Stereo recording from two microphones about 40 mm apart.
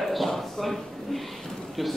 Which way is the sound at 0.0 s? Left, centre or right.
Centre.